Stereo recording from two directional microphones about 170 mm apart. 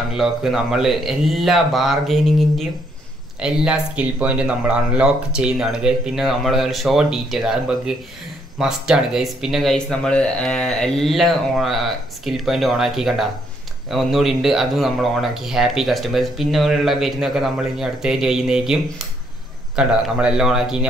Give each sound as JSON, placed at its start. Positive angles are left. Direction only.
{"t": 0.1, "sound": "speech", "side_deg": 0}